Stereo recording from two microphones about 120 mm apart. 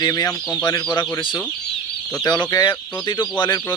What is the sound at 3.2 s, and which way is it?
Speech, 40° left (ahead or behind).